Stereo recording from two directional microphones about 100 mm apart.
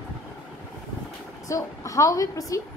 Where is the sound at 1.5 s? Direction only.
35° left (ahead or behind).